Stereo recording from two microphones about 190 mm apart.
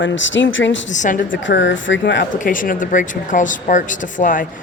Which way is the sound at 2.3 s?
45° left (ahead or behind).